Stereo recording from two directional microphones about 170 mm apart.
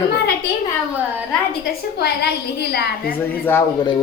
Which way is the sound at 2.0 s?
70° left (ahead or behind).